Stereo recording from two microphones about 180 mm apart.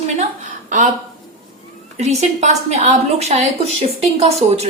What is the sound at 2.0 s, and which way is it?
A woman's voice, 40° right (ahead or behind).